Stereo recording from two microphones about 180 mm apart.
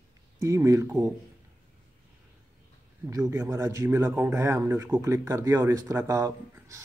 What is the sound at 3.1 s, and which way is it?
Speech, 15° right (ahead or behind).